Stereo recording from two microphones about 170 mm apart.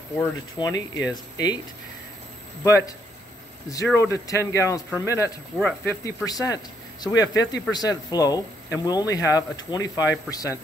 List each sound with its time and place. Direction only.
0.2 s speech: 20° left (ahead or behind)
3.7 s a man's voice: 15° left (ahead or behind)
5.6 s speech: 5° left (ahead or behind)
6.0 s speech: 20° left (ahead or behind)